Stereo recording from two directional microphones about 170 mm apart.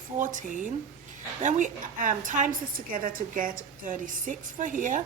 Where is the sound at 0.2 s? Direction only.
50° right (ahead or behind).